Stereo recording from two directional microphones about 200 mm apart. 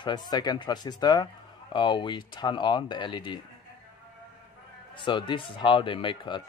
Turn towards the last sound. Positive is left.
turn(degrees=25)  # may be behind; listen again after turning